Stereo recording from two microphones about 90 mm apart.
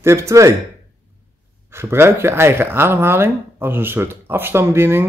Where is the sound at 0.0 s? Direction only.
30° right (ahead or behind).